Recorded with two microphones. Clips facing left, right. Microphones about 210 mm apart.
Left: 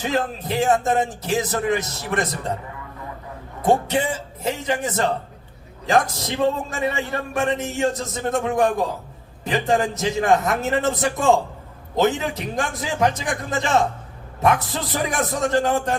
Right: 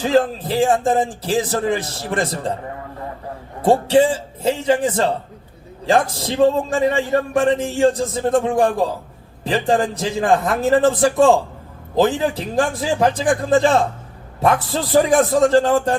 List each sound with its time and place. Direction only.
0.0 s a man's voice: 30° right (ahead or behind)
3.6 s a man's voice: 30° right (ahead or behind)